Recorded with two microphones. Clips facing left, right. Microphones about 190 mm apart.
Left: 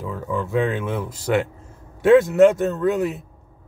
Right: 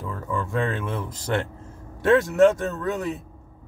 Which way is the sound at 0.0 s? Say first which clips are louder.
Left 3 dB; 5° left (ahead or behind).